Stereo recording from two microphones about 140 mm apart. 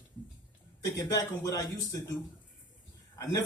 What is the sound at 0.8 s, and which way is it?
Speech, 20° left (ahead or behind).